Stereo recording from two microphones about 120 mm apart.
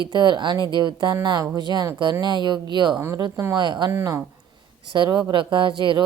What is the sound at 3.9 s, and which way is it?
Speech, 25° right (ahead or behind).